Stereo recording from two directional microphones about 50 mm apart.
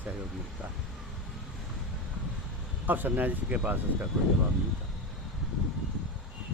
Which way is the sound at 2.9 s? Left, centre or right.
Right.